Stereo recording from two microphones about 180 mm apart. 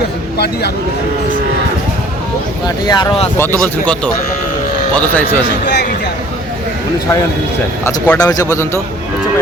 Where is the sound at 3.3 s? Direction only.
10° left (ahead or behind).